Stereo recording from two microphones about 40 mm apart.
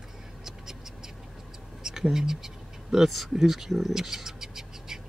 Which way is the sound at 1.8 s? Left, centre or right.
Centre.